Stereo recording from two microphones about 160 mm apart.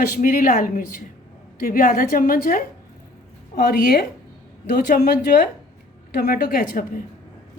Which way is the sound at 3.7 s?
75° left (ahead or behind).